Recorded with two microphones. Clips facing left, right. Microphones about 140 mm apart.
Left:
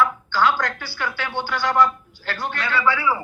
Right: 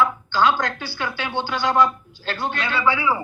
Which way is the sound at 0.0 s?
20° right (ahead or behind).